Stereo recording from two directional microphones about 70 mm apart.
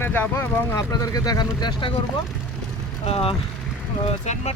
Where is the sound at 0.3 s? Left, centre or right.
Left.